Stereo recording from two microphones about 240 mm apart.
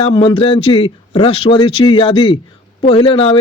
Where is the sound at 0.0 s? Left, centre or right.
Centre.